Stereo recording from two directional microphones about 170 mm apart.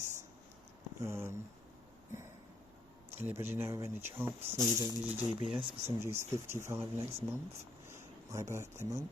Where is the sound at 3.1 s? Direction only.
15° right (ahead or behind).